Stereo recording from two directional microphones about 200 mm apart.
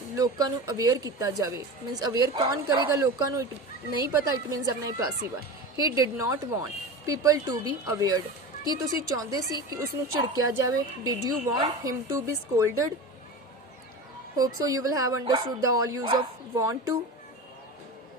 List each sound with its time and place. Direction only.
0.2 s a woman's voice: 20° right (ahead or behind)
14.3 s a woman's voice: 20° right (ahead or behind)